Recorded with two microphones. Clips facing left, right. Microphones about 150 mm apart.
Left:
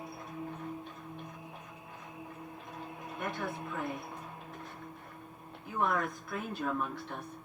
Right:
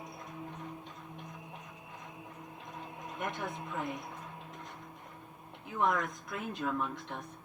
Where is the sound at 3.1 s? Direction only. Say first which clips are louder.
Left 1 dB; 20° right (ahead or behind).